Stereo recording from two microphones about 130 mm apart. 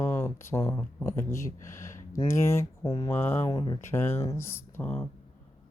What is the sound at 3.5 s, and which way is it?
Mantra, 35° left (ahead or behind).